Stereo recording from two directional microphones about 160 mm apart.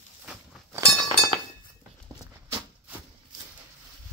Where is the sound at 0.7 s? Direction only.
25° right (ahead or behind).